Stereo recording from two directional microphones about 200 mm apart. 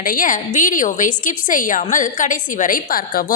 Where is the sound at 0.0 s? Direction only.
45° left (ahead or behind).